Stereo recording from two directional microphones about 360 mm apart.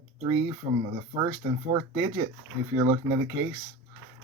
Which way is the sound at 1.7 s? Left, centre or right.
Centre.